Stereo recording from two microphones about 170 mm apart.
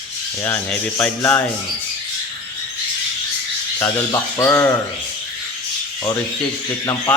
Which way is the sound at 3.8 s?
15° left (ahead or behind).